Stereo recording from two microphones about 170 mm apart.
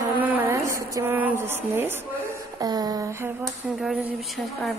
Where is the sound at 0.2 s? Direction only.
10° right (ahead or behind).